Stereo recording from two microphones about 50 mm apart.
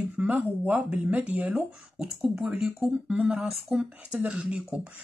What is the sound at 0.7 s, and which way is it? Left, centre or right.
Speech, right.